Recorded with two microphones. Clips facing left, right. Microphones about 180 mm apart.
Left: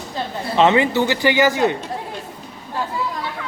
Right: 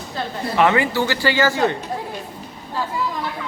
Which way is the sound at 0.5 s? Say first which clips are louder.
Left 2 dB; 20° left (ahead or behind).